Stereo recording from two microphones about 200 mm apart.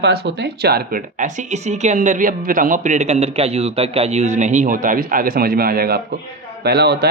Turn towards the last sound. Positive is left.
turn(degrees=-55)  # may be behind; listen again after turning